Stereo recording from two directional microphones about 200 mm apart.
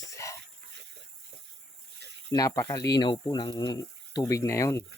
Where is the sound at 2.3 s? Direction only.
15° left (ahead or behind).